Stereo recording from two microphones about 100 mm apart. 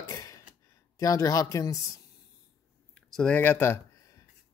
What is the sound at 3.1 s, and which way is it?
Speech, 10° left (ahead or behind).